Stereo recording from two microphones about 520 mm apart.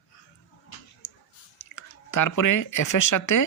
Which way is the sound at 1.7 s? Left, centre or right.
Left.